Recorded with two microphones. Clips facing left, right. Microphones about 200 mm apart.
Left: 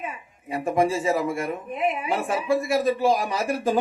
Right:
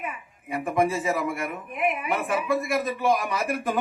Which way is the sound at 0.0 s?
25° left (ahead or behind).